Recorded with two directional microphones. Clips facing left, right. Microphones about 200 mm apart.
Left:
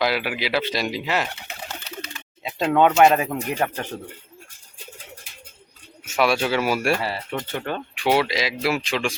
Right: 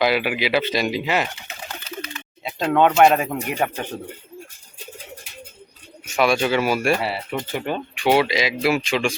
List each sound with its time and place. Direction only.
0.0 s speech: centre (ahead or behind)
1.9 s bird: 65° left (ahead or behind)
2.4 s speech: centre (ahead or behind)
6.1 s speech: 5° left (ahead or behind)
6.9 s speech: 10° right (ahead or behind)
7.9 s speech: centre (ahead or behind)